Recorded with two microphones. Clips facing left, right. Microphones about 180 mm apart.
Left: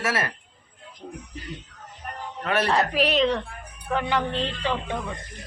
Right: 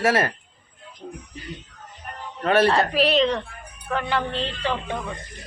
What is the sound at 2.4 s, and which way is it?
Speech, 30° right (ahead or behind).